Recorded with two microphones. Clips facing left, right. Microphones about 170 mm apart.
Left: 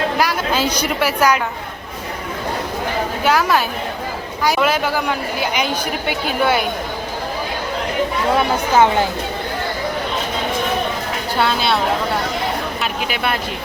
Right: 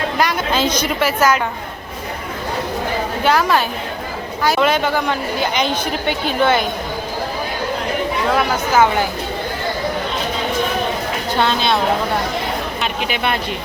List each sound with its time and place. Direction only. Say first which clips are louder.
0.2 s a woman's voice: right 1 dB; 5° left (ahead or behind)
3.2 s a woman's voice: right 1 dB; 10° left (ahead or behind)
8.4 s speech: left 1 dB; 25° left (ahead or behind)
11.3 s speech: right 1 dB; 5° left (ahead or behind)
12.8 s speech: right 3 dB; 5° left (ahead or behind)